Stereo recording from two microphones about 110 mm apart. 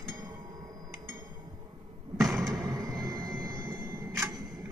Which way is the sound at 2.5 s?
30° right (ahead or behind).